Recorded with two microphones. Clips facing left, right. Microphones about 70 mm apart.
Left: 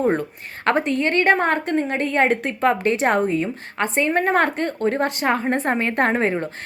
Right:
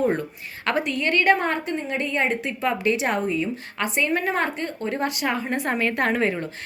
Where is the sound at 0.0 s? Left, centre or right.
Left.